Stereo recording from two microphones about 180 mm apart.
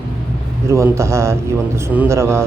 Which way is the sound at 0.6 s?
15° right (ahead or behind).